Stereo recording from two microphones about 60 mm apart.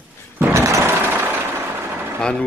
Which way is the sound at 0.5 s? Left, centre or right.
Right.